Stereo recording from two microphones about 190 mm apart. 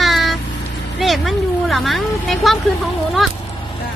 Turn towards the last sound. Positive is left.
turn(degrees=0)  # may be behind; listen again after turning